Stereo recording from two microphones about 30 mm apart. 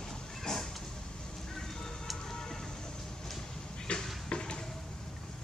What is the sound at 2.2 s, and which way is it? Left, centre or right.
Music, centre.